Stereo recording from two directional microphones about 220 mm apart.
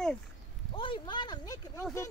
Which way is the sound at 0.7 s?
25° left (ahead or behind).